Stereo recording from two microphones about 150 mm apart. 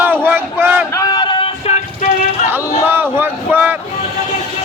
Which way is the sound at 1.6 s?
50° left (ahead or behind).